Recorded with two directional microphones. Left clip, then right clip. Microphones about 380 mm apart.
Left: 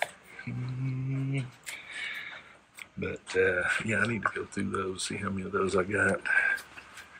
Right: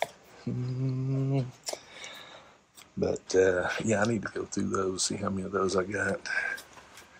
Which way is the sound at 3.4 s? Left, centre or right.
Right.